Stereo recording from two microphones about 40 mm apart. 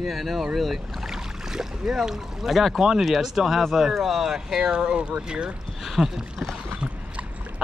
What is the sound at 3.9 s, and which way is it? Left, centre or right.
Speech, centre.